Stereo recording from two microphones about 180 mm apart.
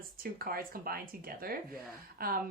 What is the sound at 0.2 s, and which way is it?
Speech, 55° right (ahead or behind).